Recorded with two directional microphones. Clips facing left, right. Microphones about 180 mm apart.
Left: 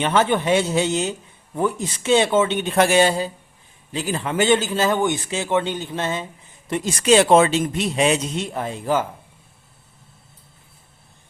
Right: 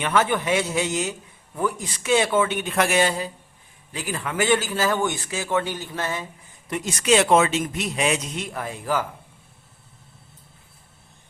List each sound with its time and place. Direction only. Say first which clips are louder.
0.0 s a man's voice: left 3 dB; 30° left (ahead or behind)